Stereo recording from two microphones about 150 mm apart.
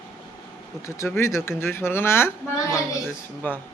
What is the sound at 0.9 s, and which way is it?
Speech, 15° left (ahead or behind).